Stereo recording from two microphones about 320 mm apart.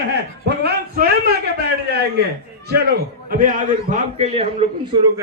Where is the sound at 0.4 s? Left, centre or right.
Right.